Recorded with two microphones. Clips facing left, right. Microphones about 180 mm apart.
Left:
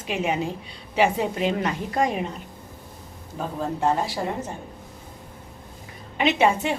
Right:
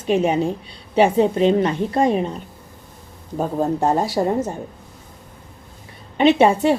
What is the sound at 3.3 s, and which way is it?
Speech, 40° right (ahead or behind).